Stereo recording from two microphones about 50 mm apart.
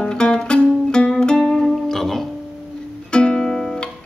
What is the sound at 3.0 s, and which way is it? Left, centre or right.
Music, centre.